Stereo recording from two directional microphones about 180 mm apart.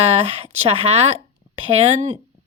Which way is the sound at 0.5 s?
35° right (ahead or behind).